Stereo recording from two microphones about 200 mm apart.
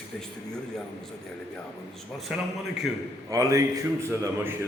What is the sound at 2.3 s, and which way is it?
Speech, centre (ahead or behind).